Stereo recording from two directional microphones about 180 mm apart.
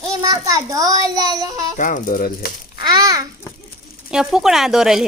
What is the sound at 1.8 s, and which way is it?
Speech, 50° left (ahead or behind).